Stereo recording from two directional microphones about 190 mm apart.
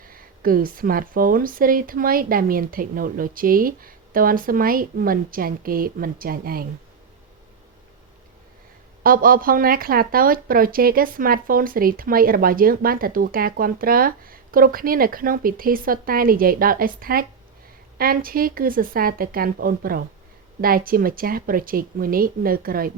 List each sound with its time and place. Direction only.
0.1 s speech: 50° right (ahead or behind)
9.0 s speech: 50° right (ahead or behind)